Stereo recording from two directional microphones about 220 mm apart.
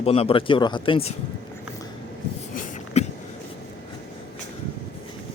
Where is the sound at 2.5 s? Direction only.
35° left (ahead or behind).